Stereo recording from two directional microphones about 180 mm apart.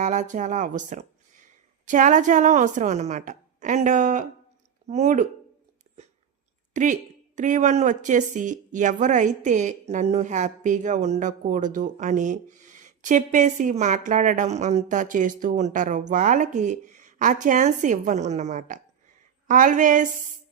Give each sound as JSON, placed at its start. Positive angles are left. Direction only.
{"t": 0.0, "sound": "a woman's voice", "side_deg": -40}
{"t": 6.7, "sound": "a woman's voice", "side_deg": -45}